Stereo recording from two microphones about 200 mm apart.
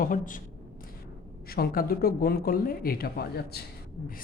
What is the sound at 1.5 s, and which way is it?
Speech, 50° left (ahead or behind).